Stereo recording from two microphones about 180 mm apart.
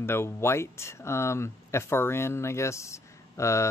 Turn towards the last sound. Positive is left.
turn(degrees=15)  # may be behind; listen again after turning